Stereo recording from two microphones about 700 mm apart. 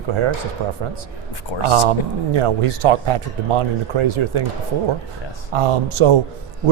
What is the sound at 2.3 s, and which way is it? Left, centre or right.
Speech, right.